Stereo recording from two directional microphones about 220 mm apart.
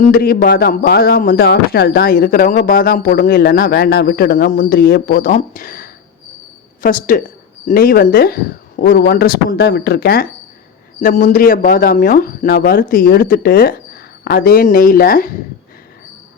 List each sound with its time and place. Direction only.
0.0 s a man's voice: 40° left (ahead or behind)